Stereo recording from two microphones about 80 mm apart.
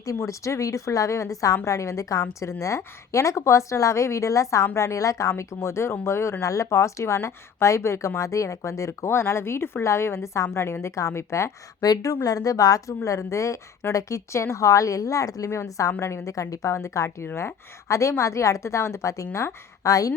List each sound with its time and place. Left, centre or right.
0.0 s a woman's voice: left
11.8 s a woman's voice: left